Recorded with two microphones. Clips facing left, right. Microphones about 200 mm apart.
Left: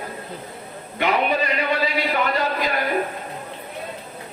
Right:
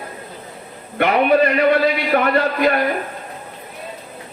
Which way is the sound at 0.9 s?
60° right (ahead or behind).